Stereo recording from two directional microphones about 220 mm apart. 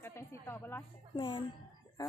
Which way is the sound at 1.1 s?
20° left (ahead or behind).